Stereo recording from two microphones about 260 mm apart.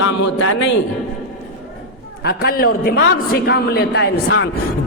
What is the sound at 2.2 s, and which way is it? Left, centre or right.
Speech, left.